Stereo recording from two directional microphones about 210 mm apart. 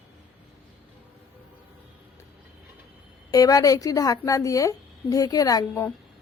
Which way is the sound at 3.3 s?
15° left (ahead or behind).